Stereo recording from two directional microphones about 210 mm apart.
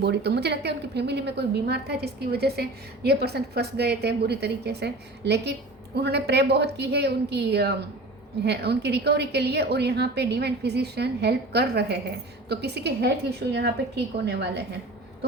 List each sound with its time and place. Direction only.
0.0 s a woman's voice: 55° right (ahead or behind)